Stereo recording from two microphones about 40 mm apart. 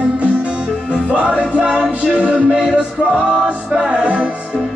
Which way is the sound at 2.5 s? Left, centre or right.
Centre.